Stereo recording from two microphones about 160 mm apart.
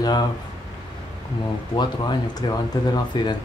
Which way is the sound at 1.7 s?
25° left (ahead or behind).